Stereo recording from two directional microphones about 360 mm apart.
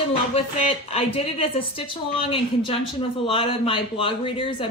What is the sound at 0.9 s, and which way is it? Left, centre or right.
Speech, centre.